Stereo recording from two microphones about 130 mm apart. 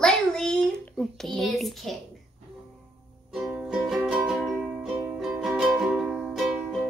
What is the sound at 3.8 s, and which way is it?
Music, 5° right (ahead or behind).